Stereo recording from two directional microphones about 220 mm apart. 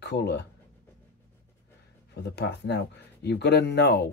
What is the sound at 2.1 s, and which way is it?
Speech, 50° left (ahead or behind).